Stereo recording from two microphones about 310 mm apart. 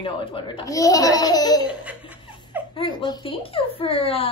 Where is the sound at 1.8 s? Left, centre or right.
Centre.